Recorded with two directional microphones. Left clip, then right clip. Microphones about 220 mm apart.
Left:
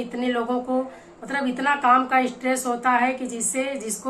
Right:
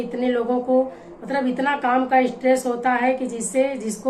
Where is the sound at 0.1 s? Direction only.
5° left (ahead or behind).